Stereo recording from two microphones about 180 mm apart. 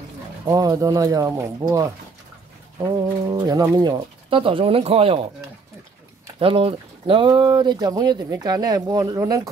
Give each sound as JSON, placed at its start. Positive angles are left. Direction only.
{"t": 0.5, "sound": "speech", "side_deg": -20}
{"t": 6.4, "sound": "speech", "side_deg": -30}